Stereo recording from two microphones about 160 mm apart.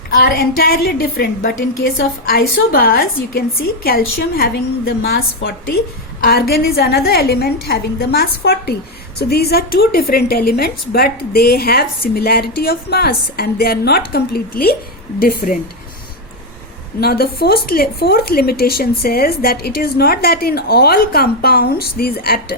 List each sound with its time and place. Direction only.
0.2 s a woman's voice: 75° left (ahead or behind)
6.2 s a woman's voice: 75° left (ahead or behind)
17.0 s a woman's voice: 75° left (ahead or behind)